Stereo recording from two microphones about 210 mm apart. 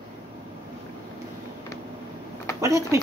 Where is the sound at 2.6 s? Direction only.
15° right (ahead or behind).